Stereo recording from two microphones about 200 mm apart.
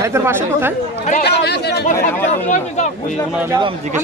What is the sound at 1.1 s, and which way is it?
Speech, 55° left (ahead or behind).